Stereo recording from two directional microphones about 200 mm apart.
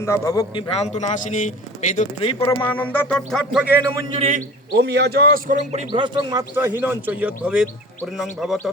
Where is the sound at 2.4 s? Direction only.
15° left (ahead or behind); by 3.7 s 5° right (ahead or behind).